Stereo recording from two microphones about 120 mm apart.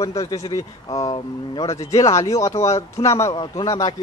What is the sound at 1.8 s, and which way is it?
Speech, 30° left (ahead or behind).